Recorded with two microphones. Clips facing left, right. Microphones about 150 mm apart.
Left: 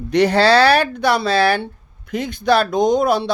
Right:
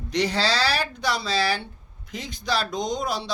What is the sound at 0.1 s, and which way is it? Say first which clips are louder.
Speech: left 11 dB; 60° left (ahead or behind).